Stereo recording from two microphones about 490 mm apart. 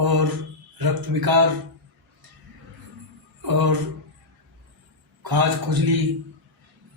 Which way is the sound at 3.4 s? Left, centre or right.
Right.